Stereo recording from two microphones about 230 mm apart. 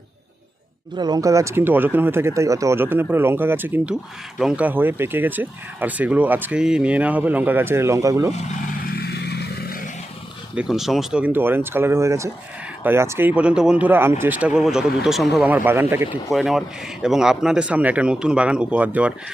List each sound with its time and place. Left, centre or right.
0.9 s speech: centre
9.0 s vehicle: left
10.5 s a man's voice: centre